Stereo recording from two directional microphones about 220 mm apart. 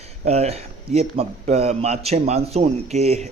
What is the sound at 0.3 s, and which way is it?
A man's voice, 30° right (ahead or behind).